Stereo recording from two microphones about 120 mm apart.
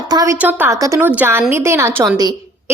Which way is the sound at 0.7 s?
25° right (ahead or behind).